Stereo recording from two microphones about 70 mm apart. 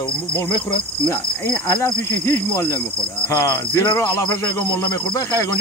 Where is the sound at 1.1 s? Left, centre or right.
Left.